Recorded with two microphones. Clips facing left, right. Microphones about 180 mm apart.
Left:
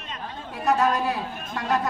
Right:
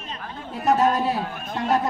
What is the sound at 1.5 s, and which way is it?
Speech, 20° right (ahead or behind).